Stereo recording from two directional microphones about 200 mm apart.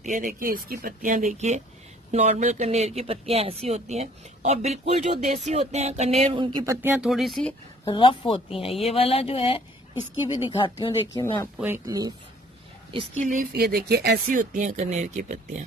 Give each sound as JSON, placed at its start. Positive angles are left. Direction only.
{"t": 0.0, "sound": "speech", "side_deg": -40}
{"t": 7.8, "sound": "speech", "side_deg": 25}
{"t": 11.5, "sound": "speech", "side_deg": -10}
{"t": 12.9, "sound": "speech", "side_deg": -35}
{"t": 13.5, "sound": "speech", "side_deg": -50}